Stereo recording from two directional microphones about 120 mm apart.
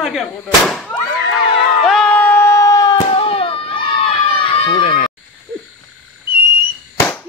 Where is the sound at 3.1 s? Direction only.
50° left (ahead or behind).